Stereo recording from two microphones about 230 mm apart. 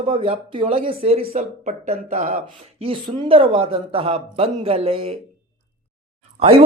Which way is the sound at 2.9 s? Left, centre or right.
Right.